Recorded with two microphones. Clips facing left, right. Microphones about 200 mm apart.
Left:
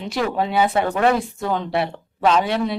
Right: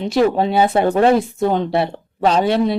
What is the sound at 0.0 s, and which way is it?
Speech, 30° right (ahead or behind).